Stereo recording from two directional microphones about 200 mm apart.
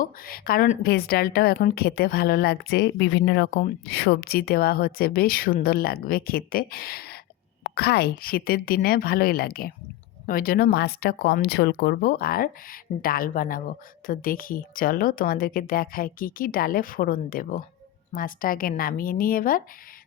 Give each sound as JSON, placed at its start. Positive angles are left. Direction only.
{"t": 0.0, "sound": "speech", "side_deg": 45}